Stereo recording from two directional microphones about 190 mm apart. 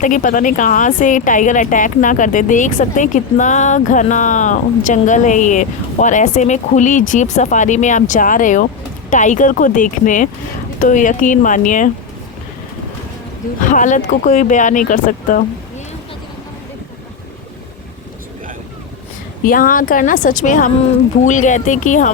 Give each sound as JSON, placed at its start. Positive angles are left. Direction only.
{"t": 0.0, "sound": "speech", "side_deg": 45}
{"t": 13.6, "sound": "speech", "side_deg": 40}
{"t": 19.5, "sound": "speech", "side_deg": 45}